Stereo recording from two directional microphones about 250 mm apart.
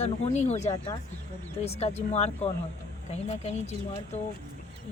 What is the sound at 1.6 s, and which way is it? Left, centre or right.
A woman's voice, left.